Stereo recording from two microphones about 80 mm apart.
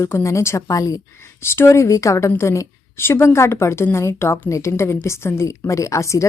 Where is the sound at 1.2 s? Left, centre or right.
Left.